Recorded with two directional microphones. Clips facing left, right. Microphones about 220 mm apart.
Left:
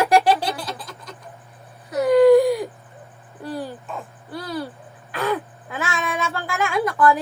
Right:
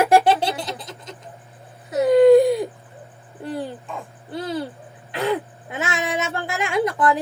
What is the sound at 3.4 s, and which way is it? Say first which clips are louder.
Dog: right 1 dB; 20° right (ahead or behind).